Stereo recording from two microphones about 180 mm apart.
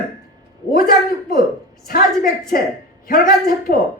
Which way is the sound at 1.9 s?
55° left (ahead or behind).